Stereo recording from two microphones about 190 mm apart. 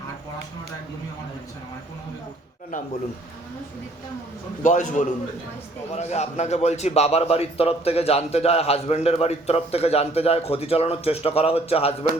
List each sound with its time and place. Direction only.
4.6 s a man's voice: 40° left (ahead or behind)